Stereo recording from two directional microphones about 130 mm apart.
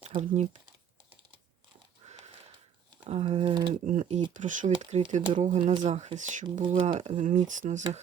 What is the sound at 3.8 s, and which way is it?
Speech, 70° right (ahead or behind).